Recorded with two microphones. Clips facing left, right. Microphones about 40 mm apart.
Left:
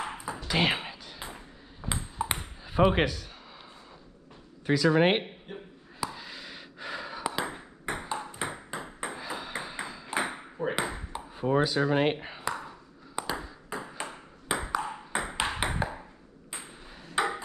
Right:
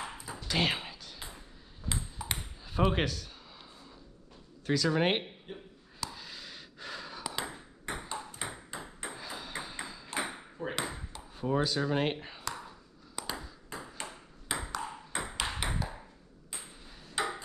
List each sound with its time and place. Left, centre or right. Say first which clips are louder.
0.0 s a sound: left 6 dB; left
0.5 s a sound: left 3 dB; centre
1.3 s ping: left 5 dB; left
2.6 s speech: left 6 dB; centre
4.6 s speech: left 5 dB; centre
5.9 s a sound: left 6 dB; centre
8.1 s ping: left 6 dB; centre
8.7 s ping: left 6 dB; left
9.1 s ping: left 3 dB; centre
13.7 s ping: left 6 dB; centre
14.0 s ping: left 5 dB; left
17.1 s ping: left 5 dB; left